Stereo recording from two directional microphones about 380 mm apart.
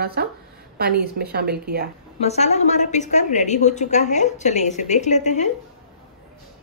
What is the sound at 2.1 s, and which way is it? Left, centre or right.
A woman's voice, centre.